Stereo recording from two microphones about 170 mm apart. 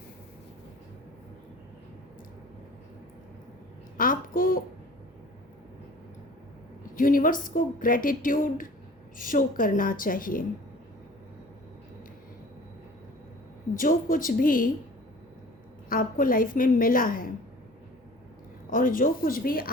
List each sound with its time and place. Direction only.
3.9 s a sound: 55° left (ahead or behind)
6.9 s a woman's voice: 55° left (ahead or behind)
13.7 s a woman's voice: 55° left (ahead or behind)
15.9 s a woman's voice: 55° left (ahead or behind)
18.7 s a woman's voice: 55° left (ahead or behind)